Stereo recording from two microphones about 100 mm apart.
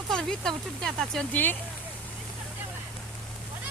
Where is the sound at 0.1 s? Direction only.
5° left (ahead or behind).